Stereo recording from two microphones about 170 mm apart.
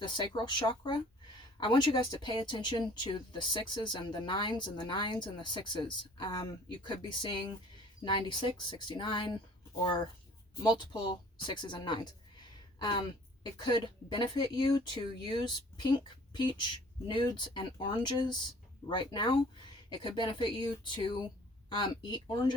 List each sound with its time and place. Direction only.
0.0 s speech: 25° left (ahead or behind)